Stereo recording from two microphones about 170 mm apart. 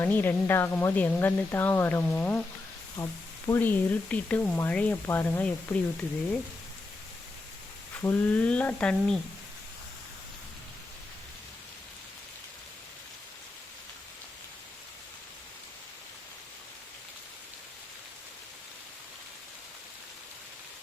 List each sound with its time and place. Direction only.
0.0 s speech: 10° left (ahead or behind)
8.0 s speech: 10° left (ahead or behind)